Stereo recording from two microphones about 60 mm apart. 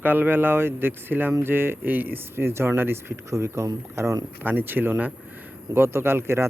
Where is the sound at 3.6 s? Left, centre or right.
Right.